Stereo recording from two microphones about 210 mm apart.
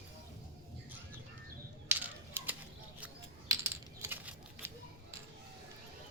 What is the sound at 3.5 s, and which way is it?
Coin, 15° right (ahead or behind).